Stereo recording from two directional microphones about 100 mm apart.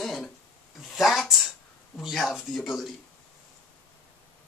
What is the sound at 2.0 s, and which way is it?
Speech, centre (ahead or behind).